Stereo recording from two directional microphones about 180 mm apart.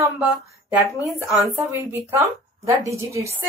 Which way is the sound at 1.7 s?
10° right (ahead or behind).